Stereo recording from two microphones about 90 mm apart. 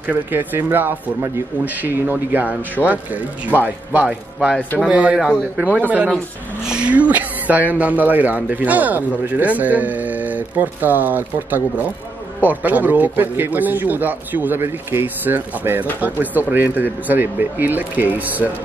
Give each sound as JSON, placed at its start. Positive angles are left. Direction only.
{"t": 0.0, "sound": "speech", "side_deg": -20}